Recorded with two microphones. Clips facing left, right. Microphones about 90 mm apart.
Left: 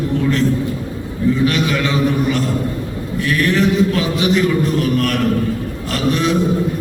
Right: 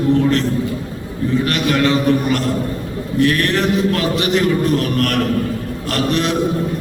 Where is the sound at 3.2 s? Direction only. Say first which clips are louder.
Even; 55° right (ahead or behind).